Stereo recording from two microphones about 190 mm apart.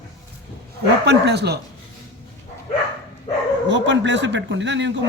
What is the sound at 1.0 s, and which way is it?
Speech, 60° right (ahead or behind).